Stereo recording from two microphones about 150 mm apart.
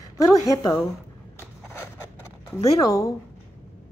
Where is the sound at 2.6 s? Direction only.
25° left (ahead or behind).